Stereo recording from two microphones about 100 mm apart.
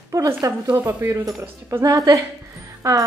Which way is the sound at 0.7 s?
20° right (ahead or behind).